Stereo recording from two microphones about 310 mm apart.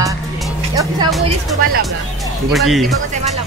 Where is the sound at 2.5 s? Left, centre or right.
Centre.